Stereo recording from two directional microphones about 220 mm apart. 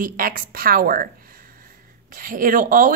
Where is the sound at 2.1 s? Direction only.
40° right (ahead or behind).